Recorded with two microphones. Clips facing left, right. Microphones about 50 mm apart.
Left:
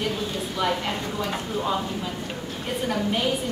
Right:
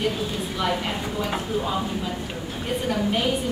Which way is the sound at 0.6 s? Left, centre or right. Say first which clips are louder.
Even; centre.